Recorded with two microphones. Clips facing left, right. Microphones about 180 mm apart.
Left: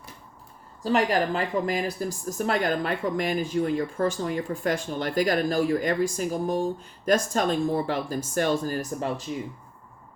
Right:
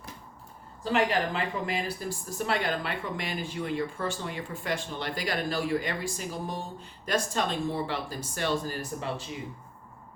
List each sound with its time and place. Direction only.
0.9 s speech: 40° left (ahead or behind)